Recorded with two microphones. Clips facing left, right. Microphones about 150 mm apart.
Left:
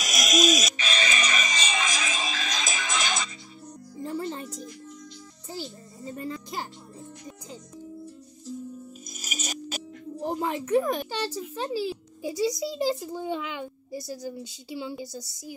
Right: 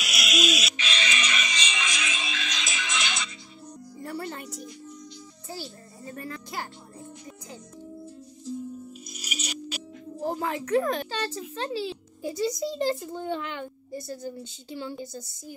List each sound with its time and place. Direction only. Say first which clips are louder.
0.0 s music: left 4 dB; 40° left (ahead or behind)
4.0 s music: left 3 dB; 20° left (ahead or behind)
5.5 s music: left 2 dB; 20° left (ahead or behind)
9.1 s music: left 1 dB; 45° left (ahead or behind)
10.2 s a sound: even; 15° left (ahead or behind)
14.3 s speech: left 2 dB; 10° left (ahead or behind)